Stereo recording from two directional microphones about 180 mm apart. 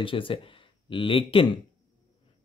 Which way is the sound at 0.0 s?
30° left (ahead or behind).